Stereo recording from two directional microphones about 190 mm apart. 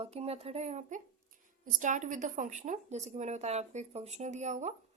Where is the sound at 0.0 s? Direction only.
35° right (ahead or behind).